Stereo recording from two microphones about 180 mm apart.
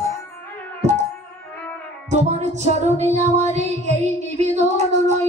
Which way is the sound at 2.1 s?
40° right (ahead or behind).